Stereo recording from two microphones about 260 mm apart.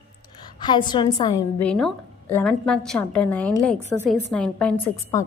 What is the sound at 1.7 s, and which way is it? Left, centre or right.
A woman's voice, centre.